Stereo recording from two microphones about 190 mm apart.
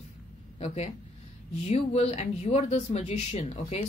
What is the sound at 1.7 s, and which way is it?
A woman's voice, 35° left (ahead or behind).